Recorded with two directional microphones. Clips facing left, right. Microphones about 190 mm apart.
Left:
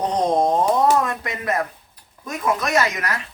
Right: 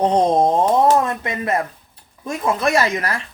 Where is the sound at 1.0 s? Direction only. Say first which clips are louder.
Right 2 dB; 25° right (ahead or behind).